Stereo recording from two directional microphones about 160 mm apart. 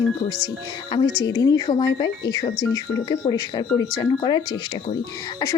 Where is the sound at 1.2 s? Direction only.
25° left (ahead or behind).